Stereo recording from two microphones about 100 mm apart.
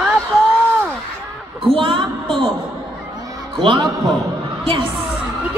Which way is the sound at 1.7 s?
60° right (ahead or behind).